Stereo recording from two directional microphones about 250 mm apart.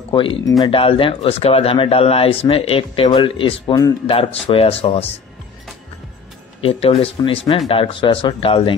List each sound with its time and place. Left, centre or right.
0.1 s speech: centre
6.6 s speech: left